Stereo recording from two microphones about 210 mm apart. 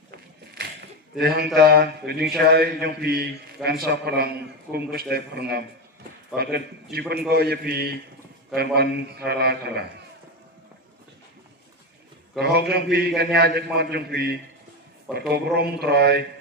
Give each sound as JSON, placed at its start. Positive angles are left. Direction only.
{"t": 0.1, "sound": "a sound", "side_deg": -50}
{"t": 1.5, "sound": "a man's voice", "side_deg": -50}
{"t": 12.4, "sound": "a man's voice", "side_deg": -50}